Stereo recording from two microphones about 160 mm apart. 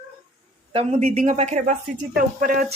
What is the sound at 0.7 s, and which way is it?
Speech, 40° right (ahead or behind).